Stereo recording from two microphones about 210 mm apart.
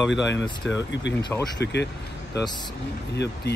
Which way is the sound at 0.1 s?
60° left (ahead or behind).